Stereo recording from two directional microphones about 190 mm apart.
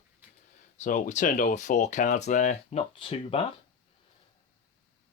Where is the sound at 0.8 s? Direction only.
40° left (ahead or behind).